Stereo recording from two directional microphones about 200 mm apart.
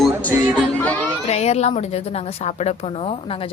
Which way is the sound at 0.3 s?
5° left (ahead or behind).